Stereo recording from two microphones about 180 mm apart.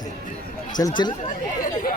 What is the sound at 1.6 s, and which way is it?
Chatter, 50° left (ahead or behind).